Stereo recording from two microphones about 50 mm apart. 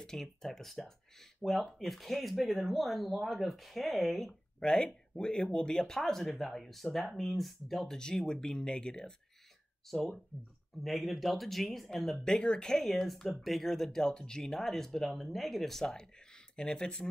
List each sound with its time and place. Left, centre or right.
0.0 s speech: centre
4.3 s speech: centre
9.8 s speech: centre
12.3 s speech: centre
12.8 s speech: centre